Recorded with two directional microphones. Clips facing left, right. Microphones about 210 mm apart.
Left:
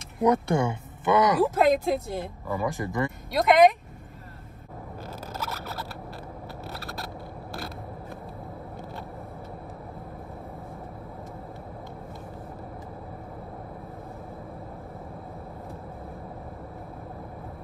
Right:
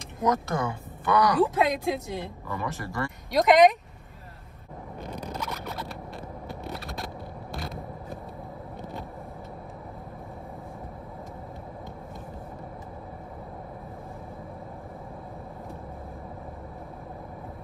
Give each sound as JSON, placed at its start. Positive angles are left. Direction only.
{"t": 0.2, "sound": "speech", "side_deg": 30}
{"t": 1.4, "sound": "speech", "side_deg": 0}
{"t": 2.6, "sound": "speech", "side_deg": 20}
{"t": 3.3, "sound": "speech", "side_deg": 0}
{"t": 5.0, "sound": "a sound", "side_deg": 5}
{"t": 7.5, "sound": "vehicle", "side_deg": 5}